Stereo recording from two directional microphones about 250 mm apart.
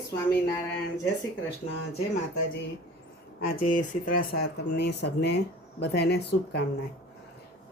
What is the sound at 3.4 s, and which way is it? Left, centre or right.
Speech, left.